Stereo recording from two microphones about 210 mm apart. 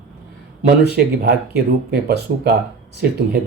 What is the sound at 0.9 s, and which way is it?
Speech, 50° right (ahead or behind).